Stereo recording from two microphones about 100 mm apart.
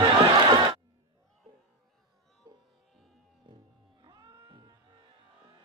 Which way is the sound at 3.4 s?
55° right (ahead or behind).